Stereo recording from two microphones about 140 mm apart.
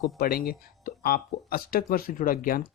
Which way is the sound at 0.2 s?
90° left.